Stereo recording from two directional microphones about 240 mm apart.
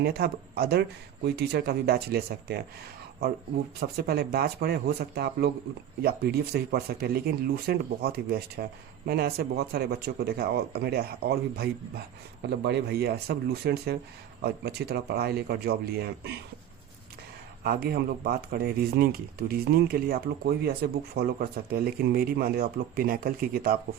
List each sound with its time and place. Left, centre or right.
0.0 s speech: right
3.8 s speech: right
17.6 s speech: right